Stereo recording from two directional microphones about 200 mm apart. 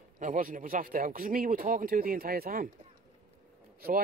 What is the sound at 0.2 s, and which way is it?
Speech, 40° right (ahead or behind).